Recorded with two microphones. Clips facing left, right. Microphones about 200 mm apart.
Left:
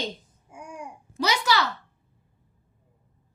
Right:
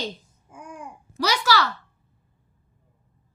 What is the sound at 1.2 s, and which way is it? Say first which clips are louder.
Speech: right 2 dB; 20° left (ahead or behind).